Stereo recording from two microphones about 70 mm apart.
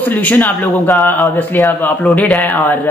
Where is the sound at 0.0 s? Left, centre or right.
Left.